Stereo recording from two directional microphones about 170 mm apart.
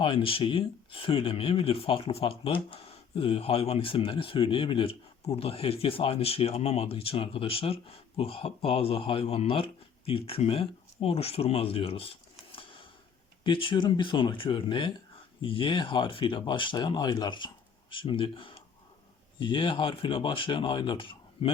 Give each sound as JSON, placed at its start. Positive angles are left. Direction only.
{"t": 0.0, "sound": "speech", "side_deg": 30}